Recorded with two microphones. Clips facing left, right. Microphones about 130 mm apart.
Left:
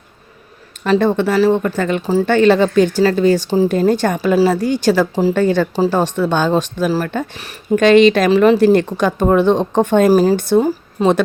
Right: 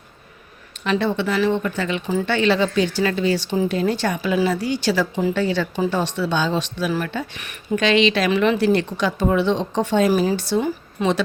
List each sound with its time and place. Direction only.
0.9 s speech: 45° left (ahead or behind)
10.6 s speech: 40° left (ahead or behind)